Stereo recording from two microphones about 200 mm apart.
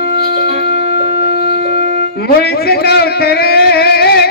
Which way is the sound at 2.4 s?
50° left (ahead or behind).